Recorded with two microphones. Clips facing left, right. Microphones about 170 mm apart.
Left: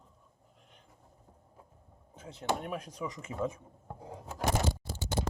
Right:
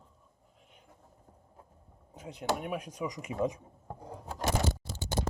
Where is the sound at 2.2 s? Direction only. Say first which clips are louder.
Right 1 dB; 15° right (ahead or behind).